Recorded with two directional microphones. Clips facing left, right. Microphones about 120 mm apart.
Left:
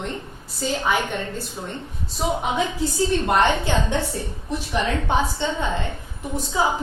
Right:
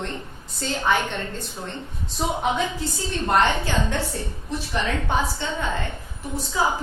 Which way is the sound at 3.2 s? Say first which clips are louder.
Right 3 dB; 20° left (ahead or behind).